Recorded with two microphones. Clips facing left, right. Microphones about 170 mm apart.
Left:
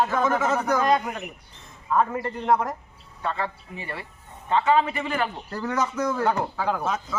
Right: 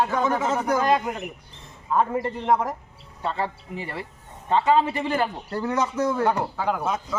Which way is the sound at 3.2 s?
30° right (ahead or behind).